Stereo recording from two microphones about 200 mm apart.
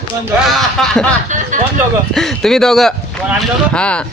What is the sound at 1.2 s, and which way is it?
Speech, 40° right (ahead or behind).